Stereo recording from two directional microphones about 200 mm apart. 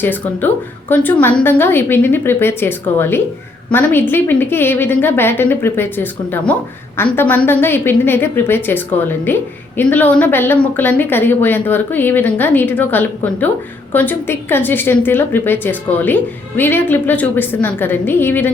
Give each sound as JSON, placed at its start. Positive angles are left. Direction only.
{"t": 0.0, "sound": "a woman's voice", "side_deg": 10}